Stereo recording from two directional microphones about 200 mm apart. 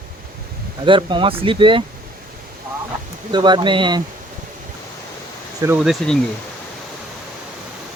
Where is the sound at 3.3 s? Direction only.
20° right (ahead or behind).